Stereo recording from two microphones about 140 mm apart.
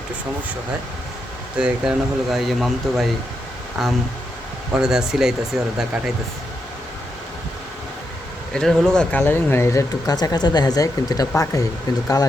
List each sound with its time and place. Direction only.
1.5 s speech: 5° right (ahead or behind)
8.5 s speech: 5° left (ahead or behind); by 11.7 s 25° left (ahead or behind)